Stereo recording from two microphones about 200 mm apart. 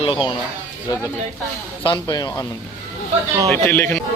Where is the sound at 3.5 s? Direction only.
10° left (ahead or behind).